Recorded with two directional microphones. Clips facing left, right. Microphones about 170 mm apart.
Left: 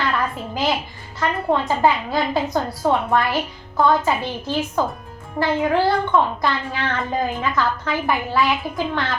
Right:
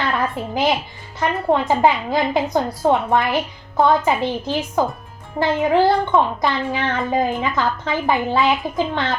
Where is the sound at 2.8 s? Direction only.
20° right (ahead or behind).